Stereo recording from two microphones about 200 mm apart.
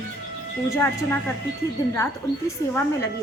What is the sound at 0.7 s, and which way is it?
A woman's voice, 10° left (ahead or behind).